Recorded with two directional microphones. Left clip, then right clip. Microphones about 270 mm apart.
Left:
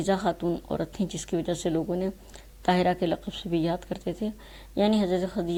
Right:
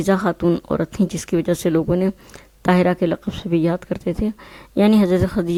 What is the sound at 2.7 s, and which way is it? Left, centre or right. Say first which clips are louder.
Speech: right 7 dB; right.